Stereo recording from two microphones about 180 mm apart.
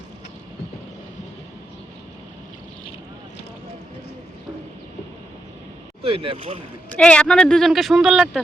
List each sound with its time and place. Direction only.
6.0 s speech: 30° right (ahead or behind)
6.9 s speech: 5° left (ahead or behind)